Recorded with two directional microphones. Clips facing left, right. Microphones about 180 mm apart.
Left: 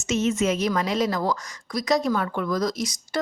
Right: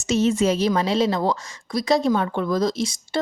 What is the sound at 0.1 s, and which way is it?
A woman's voice, 35° right (ahead or behind).